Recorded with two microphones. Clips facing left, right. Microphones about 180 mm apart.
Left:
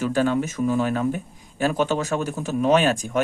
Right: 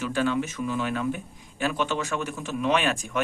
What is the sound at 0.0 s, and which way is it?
Speech, 40° left (ahead or behind).